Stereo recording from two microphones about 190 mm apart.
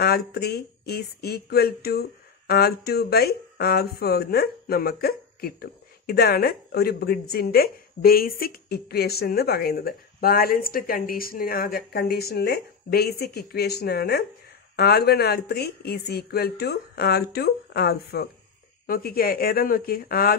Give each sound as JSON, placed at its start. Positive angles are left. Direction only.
{"t": 0.0, "sound": "speech", "side_deg": 55}